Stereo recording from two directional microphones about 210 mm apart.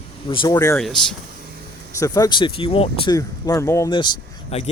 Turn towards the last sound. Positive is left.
turn(degrees=25)  # may be behind; listen again after turning